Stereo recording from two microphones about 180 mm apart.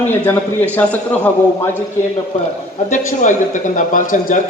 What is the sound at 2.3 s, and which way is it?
A man's voice, 40° left (ahead or behind).